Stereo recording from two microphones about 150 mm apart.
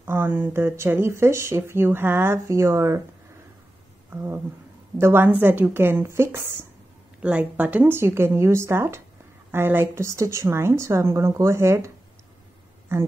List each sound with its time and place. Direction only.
0.0 s speech: 15° right (ahead or behind)
4.1 s a woman's voice: 15° right (ahead or behind)
12.9 s speech: 15° right (ahead or behind)